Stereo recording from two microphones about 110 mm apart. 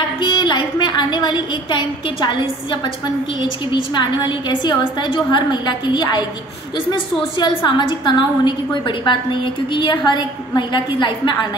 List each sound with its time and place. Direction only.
0.2 s a woman's voice: 45° left (ahead or behind)
7.3 s a woman's voice: 45° left (ahead or behind)